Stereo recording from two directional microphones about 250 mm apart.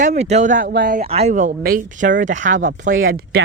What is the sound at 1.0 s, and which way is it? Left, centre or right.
Speech, right.